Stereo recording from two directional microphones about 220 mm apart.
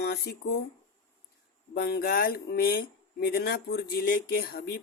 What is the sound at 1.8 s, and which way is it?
Speech, 45° left (ahead or behind).